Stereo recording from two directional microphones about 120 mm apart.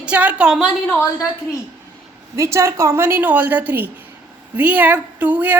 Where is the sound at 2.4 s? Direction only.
25° right (ahead or behind).